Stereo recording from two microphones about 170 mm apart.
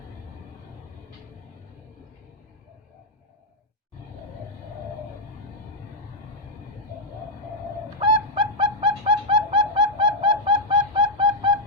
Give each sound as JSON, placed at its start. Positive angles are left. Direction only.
{"t": 7.9, "sound": "bird", "side_deg": -30}